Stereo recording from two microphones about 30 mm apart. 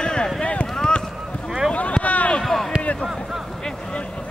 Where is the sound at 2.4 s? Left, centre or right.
Centre.